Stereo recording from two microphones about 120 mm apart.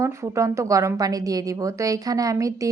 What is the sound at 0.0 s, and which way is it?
A woman's voice, 25° right (ahead or behind).